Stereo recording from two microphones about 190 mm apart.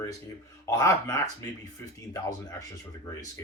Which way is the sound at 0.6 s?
15° left (ahead or behind).